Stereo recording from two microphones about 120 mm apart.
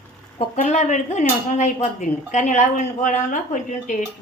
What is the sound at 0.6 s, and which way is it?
Speech, 80° left.